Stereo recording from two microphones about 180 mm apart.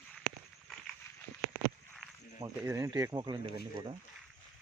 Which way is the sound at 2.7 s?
15° right (ahead or behind).